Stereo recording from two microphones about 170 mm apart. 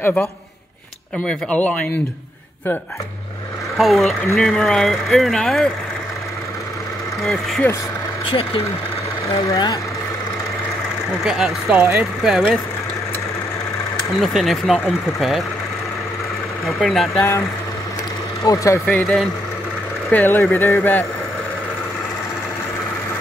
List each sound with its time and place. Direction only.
0.0 s speech: 10° left (ahead or behind)
3.7 s speech: centre (ahead or behind)
9.5 s speech: 25° left (ahead or behind)
11.2 s speech: 5° right (ahead or behind)
14.2 s speech: centre (ahead or behind)
16.6 s speech: centre (ahead or behind)
18.4 s speech: 20° left (ahead or behind)
18.9 s speech: 5° left (ahead or behind)